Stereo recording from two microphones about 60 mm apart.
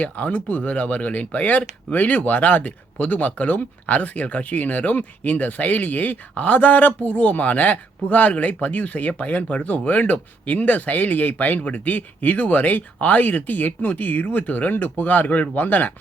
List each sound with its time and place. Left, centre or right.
0.0 s speech: left